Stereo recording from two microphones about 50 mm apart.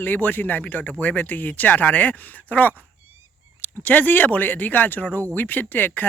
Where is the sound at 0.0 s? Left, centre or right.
Left.